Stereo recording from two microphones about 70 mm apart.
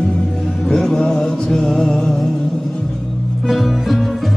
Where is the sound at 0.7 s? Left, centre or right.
Centre.